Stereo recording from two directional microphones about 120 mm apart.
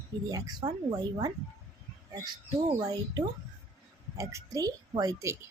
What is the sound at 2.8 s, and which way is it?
A woman's voice, 35° right (ahead or behind).